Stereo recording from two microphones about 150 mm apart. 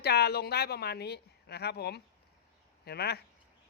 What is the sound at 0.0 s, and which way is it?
Speech, 90° left.